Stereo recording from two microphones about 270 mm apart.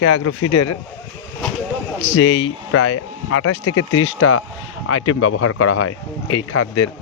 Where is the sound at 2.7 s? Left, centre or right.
Left.